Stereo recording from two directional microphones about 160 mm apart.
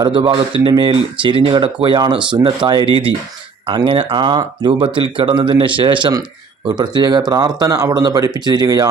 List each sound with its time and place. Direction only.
0.0 s speech: 30° right (ahead or behind)